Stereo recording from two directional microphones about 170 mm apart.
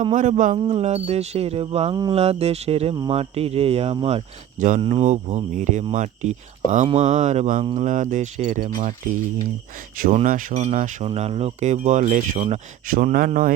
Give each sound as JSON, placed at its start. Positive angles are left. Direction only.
{"t": 0.0, "sound": "speech", "side_deg": -45}
{"t": 0.6, "sound": "speech", "side_deg": -35}
{"t": 4.8, "sound": "speech", "side_deg": -40}
{"t": 10.2, "sound": "speech", "side_deg": -50}